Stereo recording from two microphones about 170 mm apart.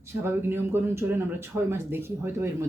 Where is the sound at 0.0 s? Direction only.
15° right (ahead or behind).